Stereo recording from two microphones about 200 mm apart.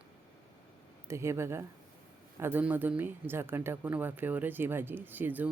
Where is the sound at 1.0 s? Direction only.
15° right (ahead or behind).